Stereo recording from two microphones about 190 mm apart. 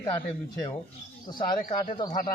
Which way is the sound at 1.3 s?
25° left (ahead or behind).